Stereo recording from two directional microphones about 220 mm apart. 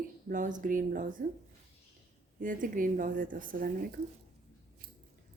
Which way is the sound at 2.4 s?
35° right (ahead or behind).